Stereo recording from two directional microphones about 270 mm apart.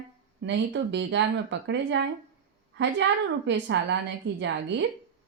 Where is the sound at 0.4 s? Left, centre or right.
Right.